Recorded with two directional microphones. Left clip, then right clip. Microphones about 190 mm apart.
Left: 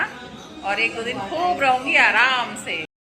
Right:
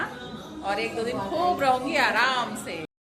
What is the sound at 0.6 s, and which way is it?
A woman's voice, 5° left (ahead or behind).